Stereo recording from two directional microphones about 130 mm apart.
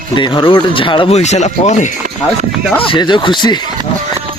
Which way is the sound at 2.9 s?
35° left (ahead or behind).